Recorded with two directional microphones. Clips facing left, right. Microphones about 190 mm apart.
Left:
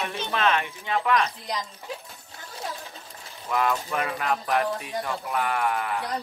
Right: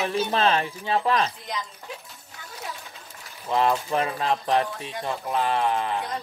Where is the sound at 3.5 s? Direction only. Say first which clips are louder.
Right 3 dB; 30° right (ahead or behind).